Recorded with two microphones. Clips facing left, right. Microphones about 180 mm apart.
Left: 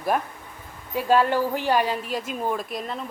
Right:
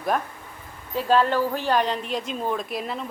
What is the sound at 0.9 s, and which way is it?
A woman's voice, 10° left (ahead or behind).